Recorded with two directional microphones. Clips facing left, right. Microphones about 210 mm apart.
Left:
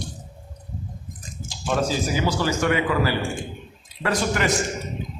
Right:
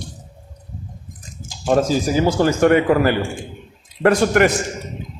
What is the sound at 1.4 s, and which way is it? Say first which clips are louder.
A man's voice: right 7 dB; 45° right (ahead or behind).